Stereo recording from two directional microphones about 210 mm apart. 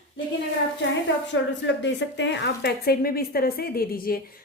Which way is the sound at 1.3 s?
60° left (ahead or behind).